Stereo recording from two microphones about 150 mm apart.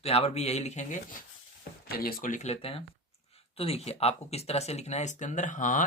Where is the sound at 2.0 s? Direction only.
70° left (ahead or behind).